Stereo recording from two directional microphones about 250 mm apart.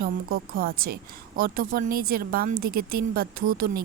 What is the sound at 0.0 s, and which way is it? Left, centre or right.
A woman's voice, right.